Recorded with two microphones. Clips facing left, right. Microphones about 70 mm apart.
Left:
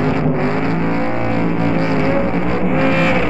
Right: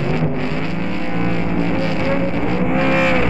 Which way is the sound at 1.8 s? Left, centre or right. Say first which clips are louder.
Left 3 dB; left.